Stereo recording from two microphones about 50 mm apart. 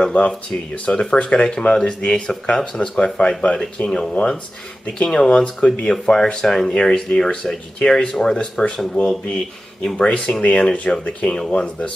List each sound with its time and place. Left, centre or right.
0.2 s speech: left
3.5 s speech: centre
9.8 s speech: left